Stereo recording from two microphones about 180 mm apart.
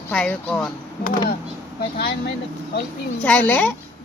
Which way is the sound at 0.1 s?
5° left (ahead or behind).